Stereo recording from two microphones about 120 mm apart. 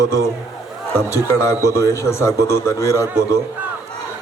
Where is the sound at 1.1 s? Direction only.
25° left (ahead or behind).